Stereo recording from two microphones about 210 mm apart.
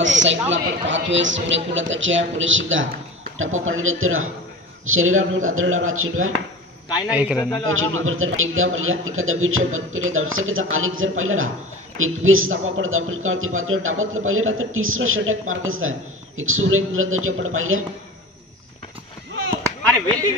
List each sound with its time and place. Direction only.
0.0 s a man's voice: 60° right (ahead or behind)
7.1 s a man's voice: 5° right (ahead or behind)
7.6 s a man's voice: 75° right (ahead or behind)